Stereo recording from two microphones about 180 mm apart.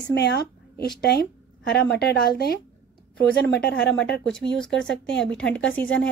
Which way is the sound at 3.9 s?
5° left (ahead or behind).